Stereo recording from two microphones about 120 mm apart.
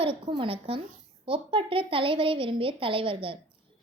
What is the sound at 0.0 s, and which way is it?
A woman's voice, 45° right (ahead or behind).